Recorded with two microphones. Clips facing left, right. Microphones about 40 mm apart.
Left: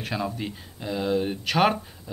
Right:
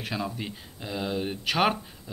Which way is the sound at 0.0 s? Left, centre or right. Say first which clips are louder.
Left 3 dB; centre.